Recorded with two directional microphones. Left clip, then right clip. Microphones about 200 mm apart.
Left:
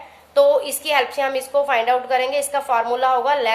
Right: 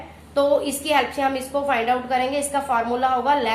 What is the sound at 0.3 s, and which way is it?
A woman's voice, 50° left (ahead or behind).